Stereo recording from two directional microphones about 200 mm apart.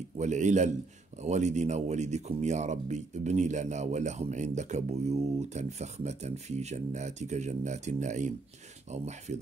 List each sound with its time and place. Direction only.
0.2 s speech: 35° right (ahead or behind)